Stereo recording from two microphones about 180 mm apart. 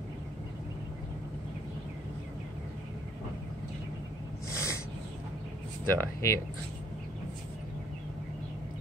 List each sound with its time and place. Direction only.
4.5 s snort: 15° left (ahead or behind)
5.9 s speech: 15° left (ahead or behind)